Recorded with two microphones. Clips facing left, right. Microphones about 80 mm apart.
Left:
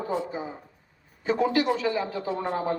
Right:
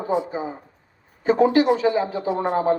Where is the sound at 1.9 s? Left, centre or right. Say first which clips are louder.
Right 6 dB; right.